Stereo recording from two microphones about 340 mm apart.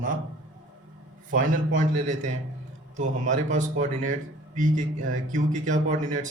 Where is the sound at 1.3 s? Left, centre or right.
Right.